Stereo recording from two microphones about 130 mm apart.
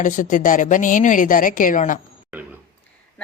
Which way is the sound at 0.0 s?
90° left.